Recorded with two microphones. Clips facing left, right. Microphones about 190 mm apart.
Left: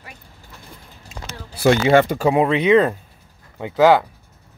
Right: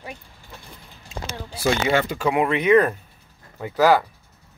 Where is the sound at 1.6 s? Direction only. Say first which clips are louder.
Left 7 dB; 60° left (ahead or behind).